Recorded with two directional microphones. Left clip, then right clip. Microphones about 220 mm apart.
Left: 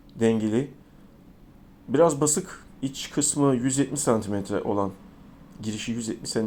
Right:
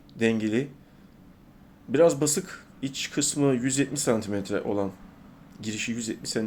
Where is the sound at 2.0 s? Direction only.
20° right (ahead or behind).